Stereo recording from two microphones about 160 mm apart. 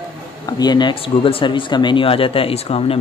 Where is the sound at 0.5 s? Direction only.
25° left (ahead or behind).